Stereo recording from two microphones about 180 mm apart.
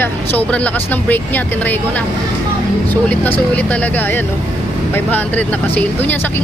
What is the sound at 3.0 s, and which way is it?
Speech, 10° left (ahead or behind).